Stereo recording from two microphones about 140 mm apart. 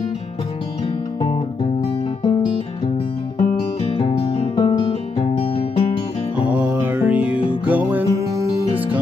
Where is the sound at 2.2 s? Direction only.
35° left (ahead or behind).